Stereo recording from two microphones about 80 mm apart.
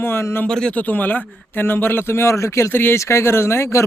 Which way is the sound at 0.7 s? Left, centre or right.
Left.